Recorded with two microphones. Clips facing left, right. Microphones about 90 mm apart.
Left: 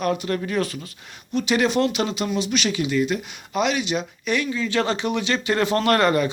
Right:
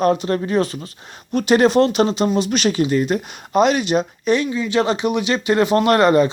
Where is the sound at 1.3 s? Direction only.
45° right (ahead or behind).